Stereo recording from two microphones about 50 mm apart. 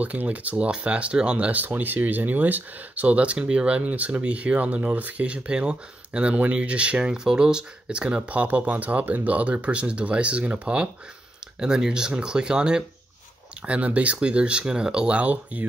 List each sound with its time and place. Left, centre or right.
0.0 s speech: right
1.6 s speech: right
11.6 s speech: centre